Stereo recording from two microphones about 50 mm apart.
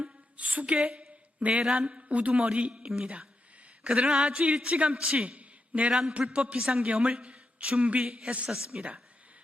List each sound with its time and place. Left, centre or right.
0.0 s a sound: right
1.6 s speech: centre
1.9 s a man's voice: right